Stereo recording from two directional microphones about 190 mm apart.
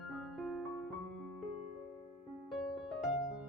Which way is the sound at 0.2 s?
Centre (ahead or behind).